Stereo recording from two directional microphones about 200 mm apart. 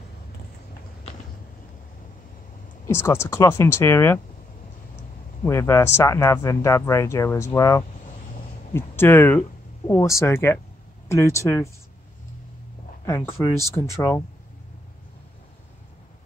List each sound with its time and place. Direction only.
2.9 s speech: 10° left (ahead or behind)
5.4 s speech: 10° left (ahead or behind)
13.0 s speech: 15° left (ahead or behind)